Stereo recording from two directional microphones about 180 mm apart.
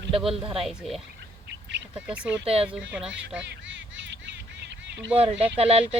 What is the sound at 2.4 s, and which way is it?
Speech, 35° right (ahead or behind).